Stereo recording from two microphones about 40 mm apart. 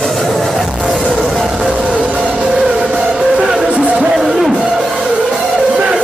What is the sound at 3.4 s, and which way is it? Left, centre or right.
Music, centre.